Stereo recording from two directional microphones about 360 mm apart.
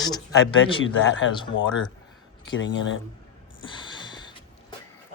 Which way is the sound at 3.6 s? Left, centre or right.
Centre.